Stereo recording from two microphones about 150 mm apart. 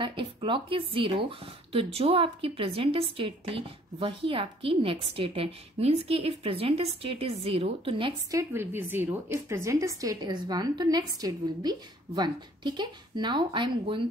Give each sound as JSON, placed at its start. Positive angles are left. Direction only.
{"t": 0.0, "sound": "speech", "side_deg": -35}
{"t": 8.3, "sound": "a woman's voice", "side_deg": -20}